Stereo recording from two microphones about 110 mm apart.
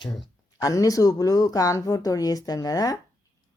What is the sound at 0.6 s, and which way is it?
Speech, 35° left (ahead or behind).